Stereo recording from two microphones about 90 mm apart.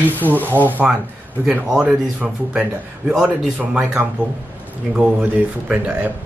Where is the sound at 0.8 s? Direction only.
5° right (ahead or behind).